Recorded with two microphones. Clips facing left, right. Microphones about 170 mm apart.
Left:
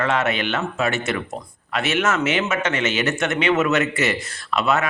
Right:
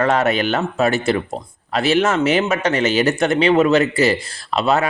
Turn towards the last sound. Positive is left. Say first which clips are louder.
# right 3 dB
turn(degrees=-30)  # may be behind; listen again after turning